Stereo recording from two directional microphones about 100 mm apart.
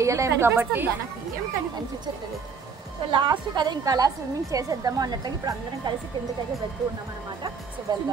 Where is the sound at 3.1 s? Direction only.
50° right (ahead or behind).